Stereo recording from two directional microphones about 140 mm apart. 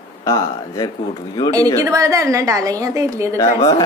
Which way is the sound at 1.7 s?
20° right (ahead or behind).